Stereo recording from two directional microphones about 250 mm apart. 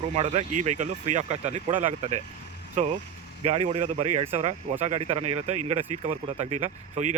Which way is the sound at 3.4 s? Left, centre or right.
Right.